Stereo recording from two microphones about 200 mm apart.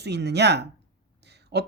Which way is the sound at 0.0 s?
55° right (ahead or behind).